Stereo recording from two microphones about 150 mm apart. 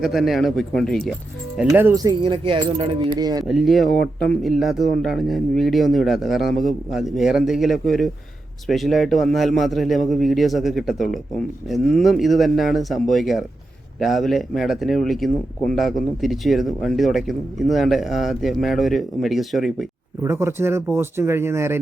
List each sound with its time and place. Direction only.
0.0 s speech: centre (ahead or behind)
1.5 s speech: 15° right (ahead or behind)
2.2 s speech: 35° right (ahead or behind)
3.4 s speech: centre (ahead or behind)
20.2 s speech: 15° right (ahead or behind)